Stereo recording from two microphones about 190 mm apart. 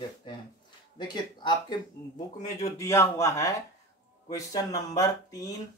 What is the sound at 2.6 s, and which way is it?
Speech, 15° left (ahead or behind).